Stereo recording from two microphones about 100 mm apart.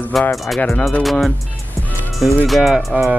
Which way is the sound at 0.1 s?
Centre (ahead or behind).